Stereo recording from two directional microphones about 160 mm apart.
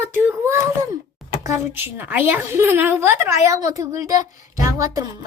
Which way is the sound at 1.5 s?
15° right (ahead or behind).